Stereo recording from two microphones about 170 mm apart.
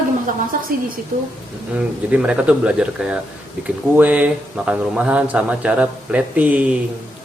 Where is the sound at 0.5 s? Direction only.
55° right (ahead or behind).